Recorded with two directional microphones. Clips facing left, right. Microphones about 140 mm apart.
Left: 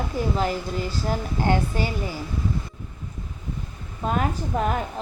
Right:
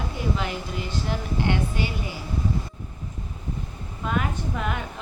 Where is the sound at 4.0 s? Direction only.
40° left (ahead or behind).